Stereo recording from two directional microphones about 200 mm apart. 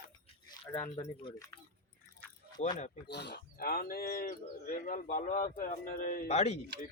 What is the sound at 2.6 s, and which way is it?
Speech, 35° left (ahead or behind).